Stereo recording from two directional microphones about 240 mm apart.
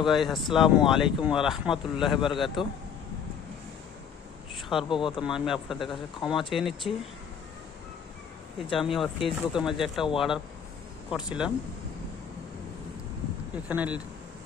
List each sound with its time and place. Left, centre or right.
0.0 s speech: centre
4.6 s a sound: centre
4.8 s speech: centre
5.2 s speech: centre
8.7 s speech: centre
13.7 s speech: centre